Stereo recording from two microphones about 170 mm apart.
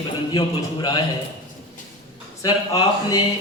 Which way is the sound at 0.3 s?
25° left (ahead or behind).